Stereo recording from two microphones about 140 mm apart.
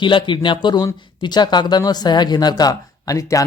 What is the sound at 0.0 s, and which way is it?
Speech, 35° left (ahead or behind).